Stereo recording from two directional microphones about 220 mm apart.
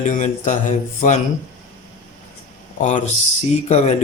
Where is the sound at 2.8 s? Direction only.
35° left (ahead or behind).